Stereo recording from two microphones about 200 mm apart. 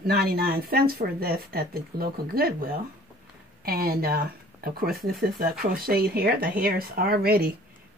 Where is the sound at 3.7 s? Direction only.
50° right (ahead or behind).